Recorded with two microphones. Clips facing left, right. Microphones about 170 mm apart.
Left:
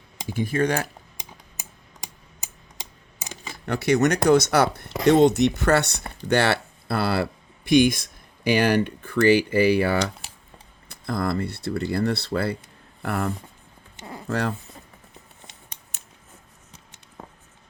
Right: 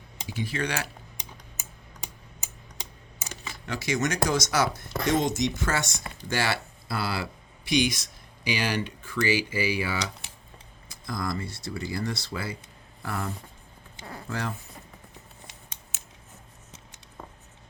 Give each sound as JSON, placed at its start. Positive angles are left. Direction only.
{"t": 0.3, "sound": "speech", "side_deg": 50}
{"t": 3.5, "sound": "speech", "side_deg": 60}
{"t": 14.0, "sound": "a sound", "side_deg": 15}
{"t": 14.3, "sound": "speech", "side_deg": 65}